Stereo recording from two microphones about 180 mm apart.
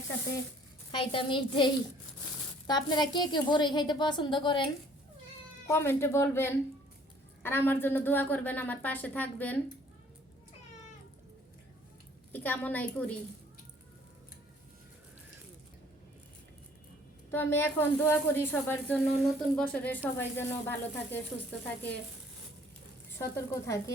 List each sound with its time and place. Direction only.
0.9 s a woman's voice: 30° left (ahead or behind)
5.6 s speech: 15° left (ahead or behind)
12.3 s speech: 10° left (ahead or behind)
17.3 s speech: 10° left (ahead or behind)
23.1 s speech: 15° left (ahead or behind)